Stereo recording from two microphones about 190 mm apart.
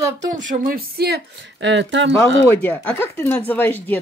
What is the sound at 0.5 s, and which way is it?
Speech, 50° right (ahead or behind).